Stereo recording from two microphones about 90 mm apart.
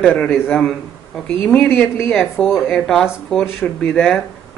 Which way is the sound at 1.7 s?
20° left (ahead or behind).